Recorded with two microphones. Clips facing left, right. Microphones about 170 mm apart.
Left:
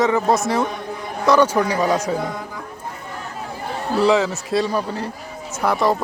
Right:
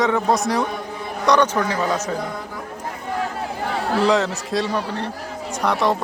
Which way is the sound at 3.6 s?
85° right.